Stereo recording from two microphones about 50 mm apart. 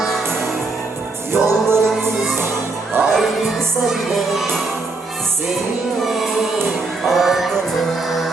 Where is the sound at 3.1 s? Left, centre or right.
Centre.